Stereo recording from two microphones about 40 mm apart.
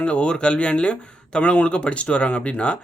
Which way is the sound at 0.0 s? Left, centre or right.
Left.